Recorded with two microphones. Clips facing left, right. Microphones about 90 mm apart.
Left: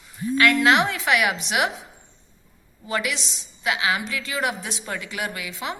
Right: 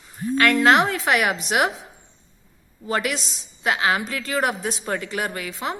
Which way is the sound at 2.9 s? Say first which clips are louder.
Right 2 dB; 40° right (ahead or behind).